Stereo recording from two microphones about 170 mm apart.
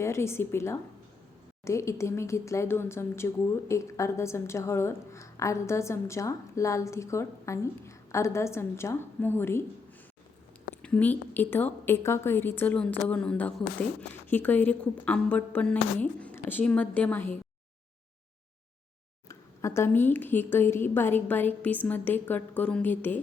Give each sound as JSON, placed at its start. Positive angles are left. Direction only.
{"t": 0.0, "sound": "speech", "side_deg": 15}
{"t": 10.8, "sound": "speech", "side_deg": 5}
{"t": 19.3, "sound": "speech", "side_deg": 15}